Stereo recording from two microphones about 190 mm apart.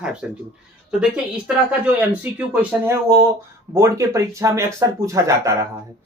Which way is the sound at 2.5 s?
10° right (ahead or behind).